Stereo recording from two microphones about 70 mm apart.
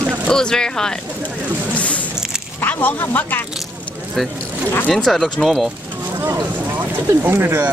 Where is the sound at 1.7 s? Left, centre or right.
Centre.